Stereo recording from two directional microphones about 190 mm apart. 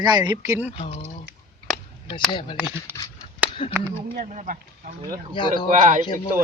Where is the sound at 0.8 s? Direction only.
35° left (ahead or behind).